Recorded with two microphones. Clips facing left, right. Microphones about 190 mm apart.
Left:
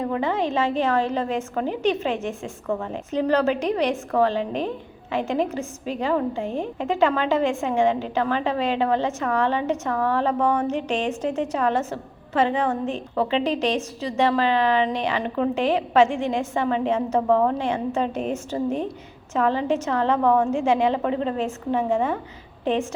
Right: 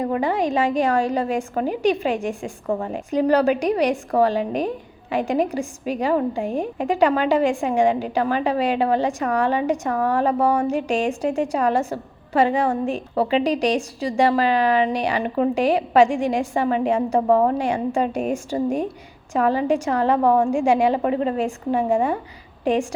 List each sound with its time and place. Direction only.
0.2 s a woman's voice: 15° right (ahead or behind)
2.6 s a woman's voice: 30° right (ahead or behind)
2.9 s a woman's voice: 10° right (ahead or behind)
17.2 s a woman's voice: 35° right (ahead or behind)
17.6 s a woman's voice: 10° right (ahead or behind)
20.2 s a woman's voice: 35° right (ahead or behind)
20.5 s a woman's voice: 10° right (ahead or behind)